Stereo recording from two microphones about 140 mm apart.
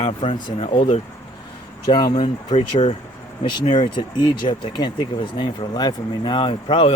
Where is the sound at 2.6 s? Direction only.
50° left (ahead or behind).